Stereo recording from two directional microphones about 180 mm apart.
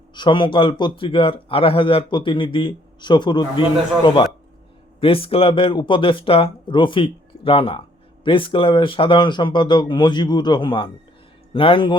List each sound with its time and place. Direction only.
0.1 s speech: 25° left (ahead or behind)